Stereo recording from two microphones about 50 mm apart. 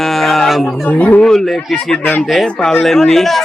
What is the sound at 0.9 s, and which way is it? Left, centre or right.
Speech, left.